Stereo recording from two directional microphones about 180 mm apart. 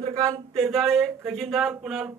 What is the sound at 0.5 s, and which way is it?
Speech, centre (ahead or behind).